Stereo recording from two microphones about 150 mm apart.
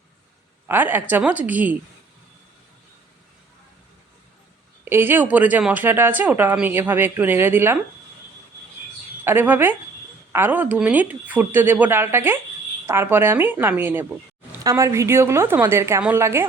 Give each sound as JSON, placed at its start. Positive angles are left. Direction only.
{"t": 0.7, "sound": "speech", "side_deg": -15}
{"t": 4.9, "sound": "speech", "side_deg": -15}
{"t": 9.2, "sound": "speech", "side_deg": -15}